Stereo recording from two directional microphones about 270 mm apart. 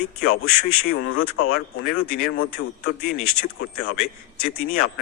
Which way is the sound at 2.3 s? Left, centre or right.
Left.